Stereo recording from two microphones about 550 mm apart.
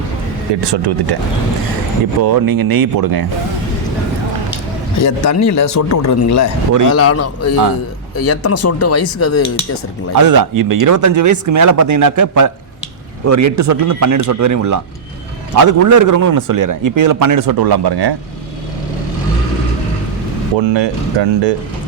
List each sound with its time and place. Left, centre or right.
0.6 s speech: right
2.2 s a man's voice: right
4.9 s a man's voice: left
10.2 s a man's voice: right
20.6 s speech: right